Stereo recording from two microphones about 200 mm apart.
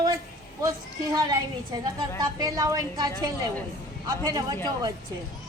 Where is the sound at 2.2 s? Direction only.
20° right (ahead or behind).